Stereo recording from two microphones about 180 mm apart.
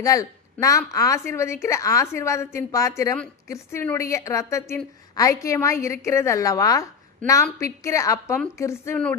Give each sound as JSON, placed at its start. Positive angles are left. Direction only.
{"t": 0.0, "sound": "a woman's voice", "side_deg": 20}